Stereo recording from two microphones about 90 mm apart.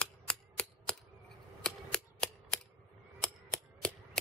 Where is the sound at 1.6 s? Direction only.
10° left (ahead or behind).